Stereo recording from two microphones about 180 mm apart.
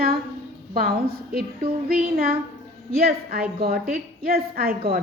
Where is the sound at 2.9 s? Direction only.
55° right (ahead or behind).